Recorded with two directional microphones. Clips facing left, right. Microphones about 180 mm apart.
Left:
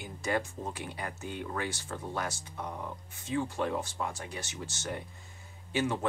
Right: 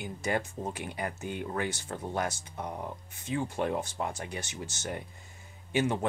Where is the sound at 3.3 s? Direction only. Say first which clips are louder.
Right 1 dB; 15° right (ahead or behind).